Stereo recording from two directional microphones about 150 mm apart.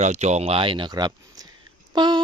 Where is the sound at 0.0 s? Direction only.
50° right (ahead or behind).